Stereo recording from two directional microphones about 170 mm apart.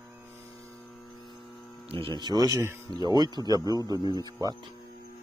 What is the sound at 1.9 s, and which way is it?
Speech, 30° right (ahead or behind).